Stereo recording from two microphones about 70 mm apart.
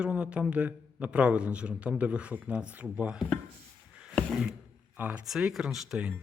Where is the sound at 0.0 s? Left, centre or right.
Centre.